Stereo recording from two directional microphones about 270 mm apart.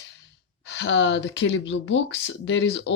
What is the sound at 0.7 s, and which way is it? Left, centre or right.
Speech, left.